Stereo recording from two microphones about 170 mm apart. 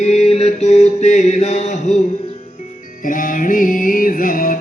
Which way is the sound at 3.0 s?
50° left (ahead or behind).